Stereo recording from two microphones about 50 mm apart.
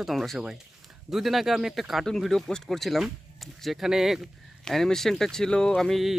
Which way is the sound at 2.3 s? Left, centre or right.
Centre.